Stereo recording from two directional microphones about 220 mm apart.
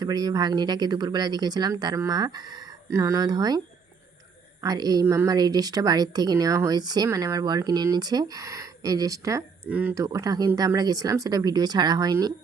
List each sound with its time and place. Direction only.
0.0 s a woman's voice: 15° right (ahead or behind)
4.6 s a woman's voice: 15° right (ahead or behind)